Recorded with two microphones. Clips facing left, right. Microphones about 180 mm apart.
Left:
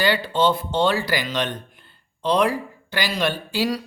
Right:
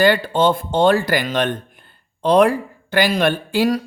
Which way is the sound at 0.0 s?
50° right (ahead or behind).